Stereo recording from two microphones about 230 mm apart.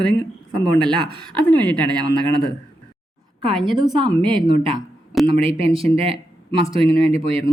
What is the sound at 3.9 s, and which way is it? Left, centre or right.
A woman's voice, centre.